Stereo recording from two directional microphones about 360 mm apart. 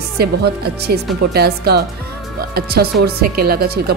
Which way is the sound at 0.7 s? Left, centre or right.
Right.